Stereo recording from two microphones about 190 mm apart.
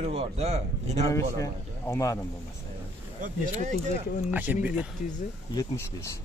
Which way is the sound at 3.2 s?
40° right (ahead or behind).